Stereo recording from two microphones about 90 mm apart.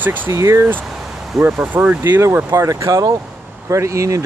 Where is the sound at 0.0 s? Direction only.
20° right (ahead or behind).